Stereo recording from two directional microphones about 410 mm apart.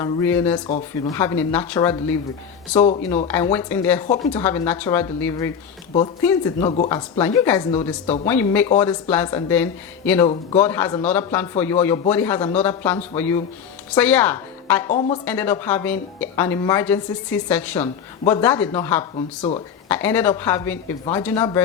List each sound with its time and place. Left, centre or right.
0.0 s speech: centre
14.8 s speech: centre
15.2 s speech: centre